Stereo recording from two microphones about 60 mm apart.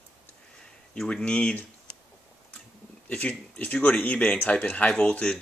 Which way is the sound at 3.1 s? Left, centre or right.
Left.